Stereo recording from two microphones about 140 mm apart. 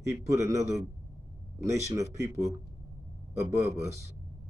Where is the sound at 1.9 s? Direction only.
20° right (ahead or behind).